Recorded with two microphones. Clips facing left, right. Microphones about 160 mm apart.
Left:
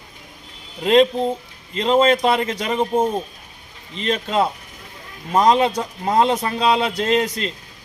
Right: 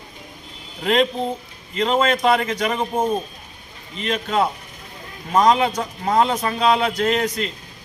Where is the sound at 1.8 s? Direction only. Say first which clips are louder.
Left 2 dB; 30° left (ahead or behind).